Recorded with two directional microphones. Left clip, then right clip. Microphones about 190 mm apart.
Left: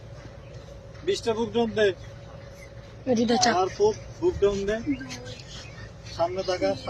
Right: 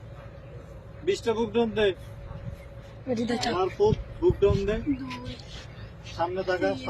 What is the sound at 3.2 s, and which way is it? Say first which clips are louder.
Speech: left 7 dB; 30° left (ahead or behind).